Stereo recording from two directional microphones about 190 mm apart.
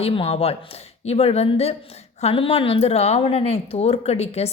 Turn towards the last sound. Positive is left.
turn(degrees=35)  # may be behind; listen again after turning